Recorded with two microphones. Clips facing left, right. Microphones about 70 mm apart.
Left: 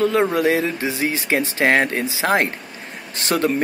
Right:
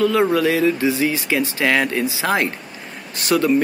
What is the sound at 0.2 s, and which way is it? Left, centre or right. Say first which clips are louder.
Speech: right 2 dB; left.